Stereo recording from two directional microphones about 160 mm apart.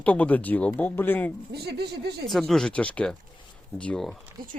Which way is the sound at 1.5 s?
90° right.